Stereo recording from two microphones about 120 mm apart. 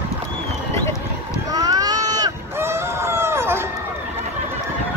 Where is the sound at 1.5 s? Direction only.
30° right (ahead or behind).